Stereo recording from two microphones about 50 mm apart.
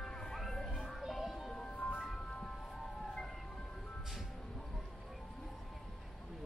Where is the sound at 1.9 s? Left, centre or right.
Centre.